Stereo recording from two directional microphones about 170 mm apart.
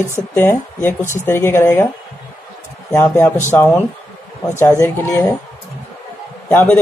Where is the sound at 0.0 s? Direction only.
15° left (ahead or behind).